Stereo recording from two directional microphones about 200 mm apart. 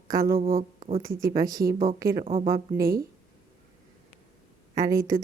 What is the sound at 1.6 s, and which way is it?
Speech, 45° right (ahead or behind).